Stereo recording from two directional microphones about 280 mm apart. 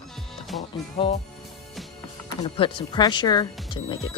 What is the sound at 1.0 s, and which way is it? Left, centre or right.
Speech, centre.